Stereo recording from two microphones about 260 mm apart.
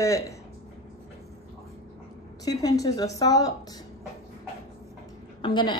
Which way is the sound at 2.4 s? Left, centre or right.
Centre.